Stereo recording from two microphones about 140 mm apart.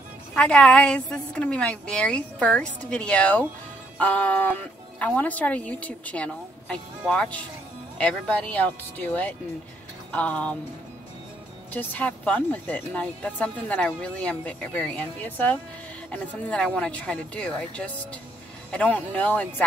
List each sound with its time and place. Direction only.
0.3 s speech: 5° left (ahead or behind)
11.7 s speech: 15° left (ahead or behind)